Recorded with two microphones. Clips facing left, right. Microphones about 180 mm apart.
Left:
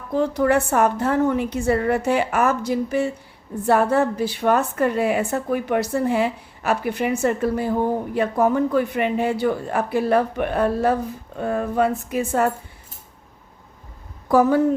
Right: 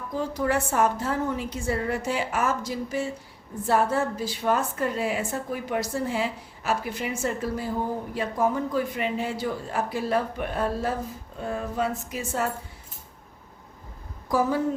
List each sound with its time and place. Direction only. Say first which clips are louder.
0.1 s a woman's voice: left 7 dB; 65° left (ahead or behind)
14.3 s a woman's voice: left 8 dB; 60° left (ahead or behind)